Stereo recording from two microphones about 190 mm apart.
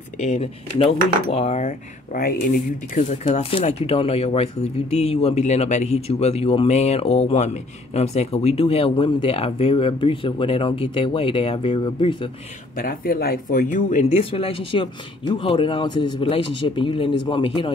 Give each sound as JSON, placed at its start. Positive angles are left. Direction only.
{"t": 0.2, "sound": "speech", "side_deg": 40}
{"t": 2.1, "sound": "speech", "side_deg": 50}
{"t": 12.7, "sound": "speech", "side_deg": 50}
{"t": 14.3, "sound": "speech", "side_deg": 30}